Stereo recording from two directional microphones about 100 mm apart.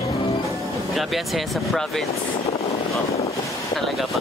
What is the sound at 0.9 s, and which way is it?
Speech, centre (ahead or behind).